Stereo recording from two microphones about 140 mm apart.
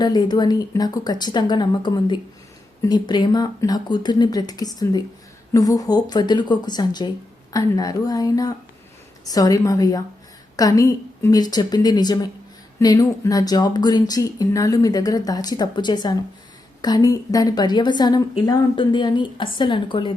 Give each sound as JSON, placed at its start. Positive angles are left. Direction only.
{"t": 0.0, "sound": "a woman's voice", "side_deg": 30}